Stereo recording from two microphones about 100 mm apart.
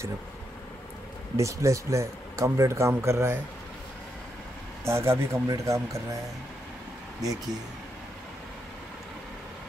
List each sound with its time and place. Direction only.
1.3 s speech: 30° right (ahead or behind)
4.8 s speech: 25° right (ahead or behind)